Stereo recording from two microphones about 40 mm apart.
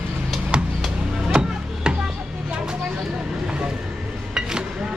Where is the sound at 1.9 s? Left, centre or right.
Centre.